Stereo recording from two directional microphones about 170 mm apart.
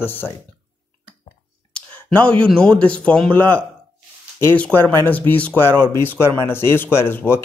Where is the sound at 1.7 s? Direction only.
5° left (ahead or behind).